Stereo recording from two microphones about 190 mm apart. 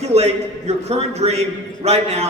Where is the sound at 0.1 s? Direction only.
35° right (ahead or behind).